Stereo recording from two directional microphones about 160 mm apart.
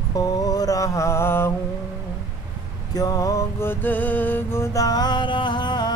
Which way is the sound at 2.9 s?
20° left (ahead or behind).